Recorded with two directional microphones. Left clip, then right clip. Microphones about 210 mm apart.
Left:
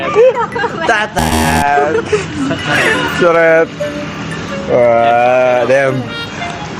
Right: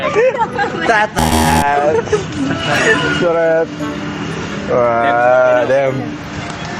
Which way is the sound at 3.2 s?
45° left (ahead or behind).